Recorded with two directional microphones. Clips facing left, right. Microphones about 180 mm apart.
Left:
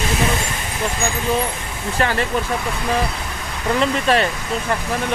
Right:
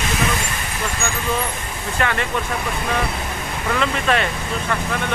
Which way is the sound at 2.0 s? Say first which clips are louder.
Left 2 dB; 35° left (ahead or behind).